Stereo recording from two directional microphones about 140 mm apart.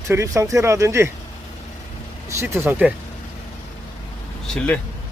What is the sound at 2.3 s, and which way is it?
Speech, 20° right (ahead or behind).